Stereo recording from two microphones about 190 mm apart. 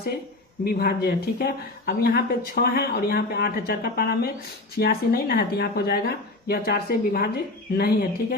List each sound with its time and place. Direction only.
0.6 s a woman's voice: 55° left (ahead or behind)